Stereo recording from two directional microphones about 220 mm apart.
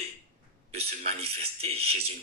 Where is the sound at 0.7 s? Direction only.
25° right (ahead or behind).